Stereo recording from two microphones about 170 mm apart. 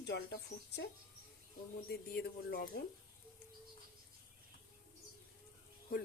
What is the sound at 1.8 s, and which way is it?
Speech, 65° left (ahead or behind).